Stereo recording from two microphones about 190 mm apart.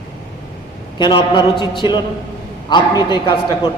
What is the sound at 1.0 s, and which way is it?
A man's voice, 25° left (ahead or behind).